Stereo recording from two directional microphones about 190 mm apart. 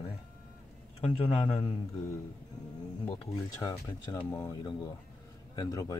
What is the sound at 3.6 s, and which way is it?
Speech, 20° left (ahead or behind).